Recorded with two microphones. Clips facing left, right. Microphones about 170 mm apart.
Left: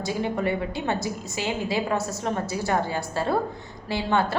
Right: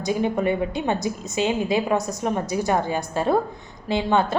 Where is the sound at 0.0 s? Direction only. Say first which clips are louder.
Right 4 dB; 20° right (ahead or behind).